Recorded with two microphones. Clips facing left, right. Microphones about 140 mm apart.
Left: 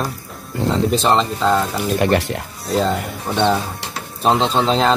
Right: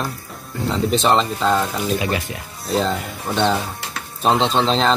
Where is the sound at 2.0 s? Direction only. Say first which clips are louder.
Left 7 dB; 70° left (ahead or behind).